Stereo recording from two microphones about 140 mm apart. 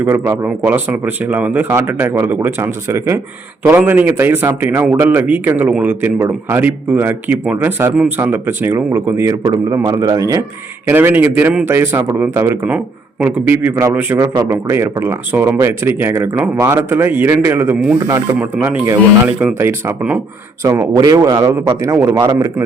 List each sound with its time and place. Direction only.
0.0 s a man's voice: 15° right (ahead or behind)
10.8 s a man's voice: 15° right (ahead or behind)
20.7 s speech: 25° right (ahead or behind)